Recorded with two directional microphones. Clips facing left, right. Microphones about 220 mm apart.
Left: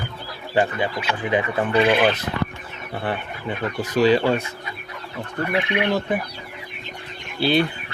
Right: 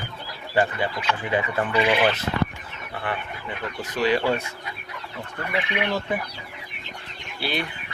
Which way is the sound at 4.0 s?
30° left (ahead or behind).